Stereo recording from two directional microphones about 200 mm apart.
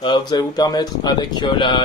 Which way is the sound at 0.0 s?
20° left (ahead or behind).